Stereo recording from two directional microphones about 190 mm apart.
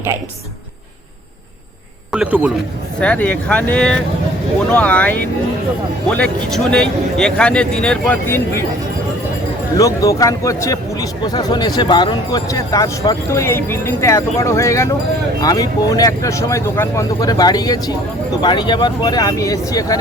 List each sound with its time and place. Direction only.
2.1 s a man's voice: 5° right (ahead or behind)
3.0 s a man's voice: 10° left (ahead or behind)
9.7 s speech: 15° left (ahead or behind)